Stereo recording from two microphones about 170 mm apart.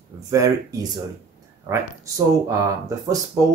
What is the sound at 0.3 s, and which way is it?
Speech, 20° right (ahead or behind).